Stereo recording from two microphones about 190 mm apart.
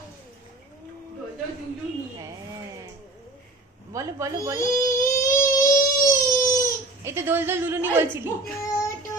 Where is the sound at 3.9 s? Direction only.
15° right (ahead or behind).